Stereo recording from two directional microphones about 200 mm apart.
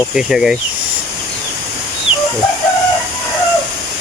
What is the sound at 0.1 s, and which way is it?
Speech, 5° right (ahead or behind).